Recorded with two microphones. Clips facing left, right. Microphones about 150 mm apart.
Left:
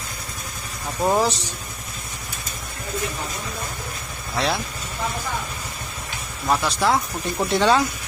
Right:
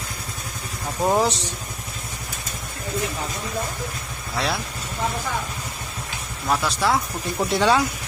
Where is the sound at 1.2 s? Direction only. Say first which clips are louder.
Even; 20° right (ahead or behind).